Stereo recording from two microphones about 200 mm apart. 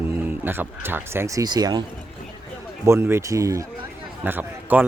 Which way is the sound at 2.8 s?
15° right (ahead or behind).